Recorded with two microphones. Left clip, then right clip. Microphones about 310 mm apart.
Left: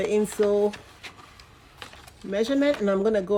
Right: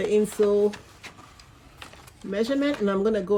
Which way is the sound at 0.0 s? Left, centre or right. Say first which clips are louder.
Right 1 dB; centre.